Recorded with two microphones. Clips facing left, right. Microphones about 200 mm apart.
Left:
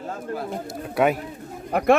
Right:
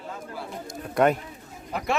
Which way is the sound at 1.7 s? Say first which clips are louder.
Left 10 dB; 55° left (ahead or behind).